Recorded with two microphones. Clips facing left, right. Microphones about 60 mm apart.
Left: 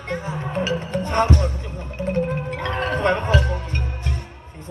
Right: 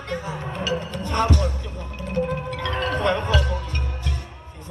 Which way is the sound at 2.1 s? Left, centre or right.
Left.